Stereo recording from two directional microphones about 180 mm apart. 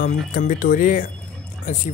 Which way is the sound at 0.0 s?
50° left (ahead or behind).